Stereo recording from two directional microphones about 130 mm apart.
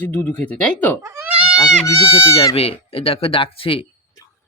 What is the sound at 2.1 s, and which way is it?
Speech, 45° left (ahead or behind).